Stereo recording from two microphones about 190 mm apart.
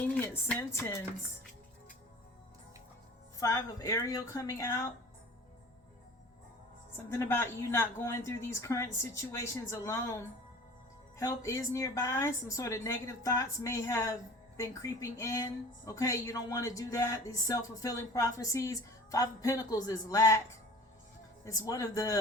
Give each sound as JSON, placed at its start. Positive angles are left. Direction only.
{"t": 0.0, "sound": "a woman's voice", "side_deg": 10}
{"t": 3.3, "sound": "speech", "side_deg": 15}
{"t": 6.9, "sound": "speech", "side_deg": 15}
{"t": 21.4, "sound": "speech", "side_deg": 15}